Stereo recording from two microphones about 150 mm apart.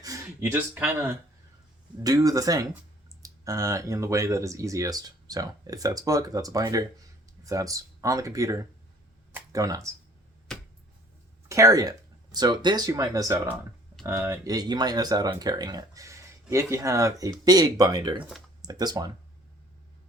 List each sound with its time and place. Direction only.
0.0 s speech: 20° right (ahead or behind)
2.0 s speech: 25° right (ahead or behind)
11.4 s speech: 20° right (ahead or behind)